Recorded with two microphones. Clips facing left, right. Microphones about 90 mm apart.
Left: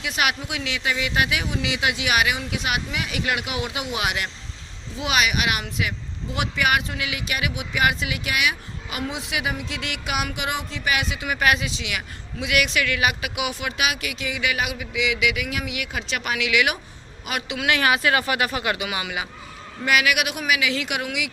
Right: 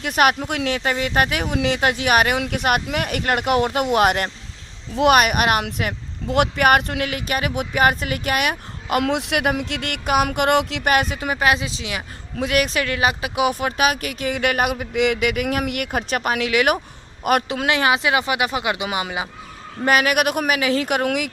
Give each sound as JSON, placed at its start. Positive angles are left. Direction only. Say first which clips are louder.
{"t": 0.0, "sound": "speech", "louder": "right 7 dB", "side_deg": -45}
{"t": 10.8, "sound": "speech", "louder": "right 6 dB", "side_deg": -45}
{"t": 11.3, "sound": "speech", "louder": "right 1 dB", "side_deg": -25}
{"t": 17.7, "sound": "speech", "louder": "right 1 dB", "side_deg": -25}
{"t": 19.8, "sound": "speech", "louder": "right 4 dB", "side_deg": -40}